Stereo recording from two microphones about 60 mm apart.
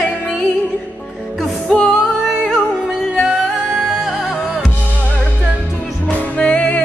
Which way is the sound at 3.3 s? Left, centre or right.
Centre.